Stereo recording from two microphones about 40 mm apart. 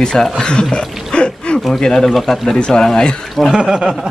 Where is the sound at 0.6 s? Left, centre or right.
Left.